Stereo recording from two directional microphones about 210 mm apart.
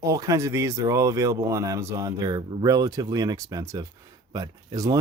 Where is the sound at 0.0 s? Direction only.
15° right (ahead or behind).